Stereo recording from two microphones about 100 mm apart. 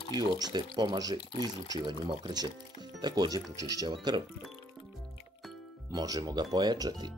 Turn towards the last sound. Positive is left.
turn(degrees=-40)  # may be behind; listen again after turning